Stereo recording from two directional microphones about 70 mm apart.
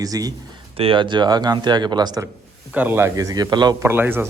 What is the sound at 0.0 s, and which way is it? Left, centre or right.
Speech, right.